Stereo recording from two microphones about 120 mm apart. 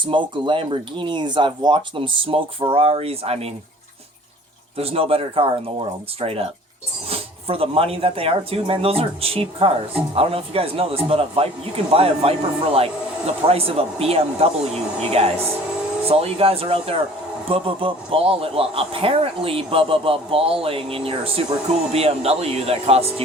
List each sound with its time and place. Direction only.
0.1 s speech: 45° right (ahead or behind)
4.8 s speech: 55° right (ahead or behind)